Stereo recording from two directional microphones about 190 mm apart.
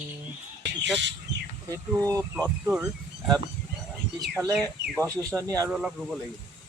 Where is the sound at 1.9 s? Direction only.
15° right (ahead or behind).